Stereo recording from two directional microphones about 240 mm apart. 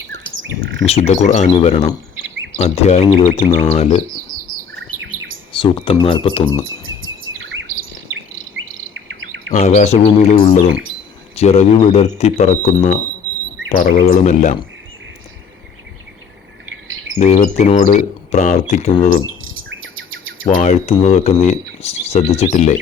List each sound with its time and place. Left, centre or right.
0.5 s bird: right
0.9 s speech: left
5.5 s speech: left
9.5 s speech: left
17.2 s speech: left
20.4 s speech: left